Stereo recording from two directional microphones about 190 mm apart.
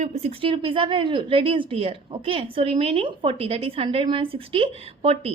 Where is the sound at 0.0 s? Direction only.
30° right (ahead or behind).